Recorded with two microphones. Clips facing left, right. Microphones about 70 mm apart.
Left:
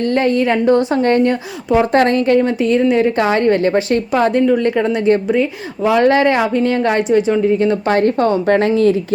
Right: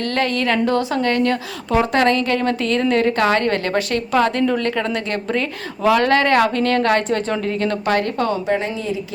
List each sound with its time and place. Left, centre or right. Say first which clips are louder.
0.0 s a woman's voice: left 5 dB; left
7.9 s a woman's voice: left 6 dB; left
8.4 s speech: left 9 dB; left